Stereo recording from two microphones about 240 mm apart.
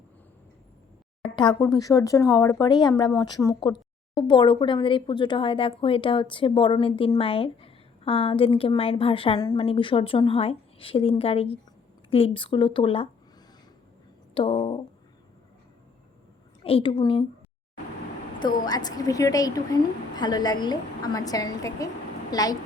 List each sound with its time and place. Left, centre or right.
1.4 s a woman's voice: centre
14.3 s a woman's voice: left
16.6 s a woman's voice: left
18.6 s a woman's voice: centre